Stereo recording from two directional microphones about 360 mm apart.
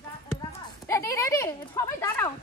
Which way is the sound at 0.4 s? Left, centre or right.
Centre.